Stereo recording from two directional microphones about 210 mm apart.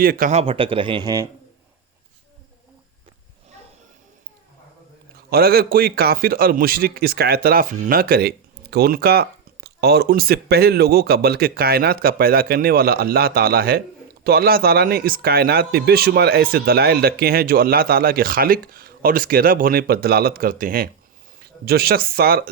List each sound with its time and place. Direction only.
0.0 s a man's voice: 45° right (ahead or behind); by 1.3 s 15° right (ahead or behind)
5.3 s a man's voice: 45° right (ahead or behind)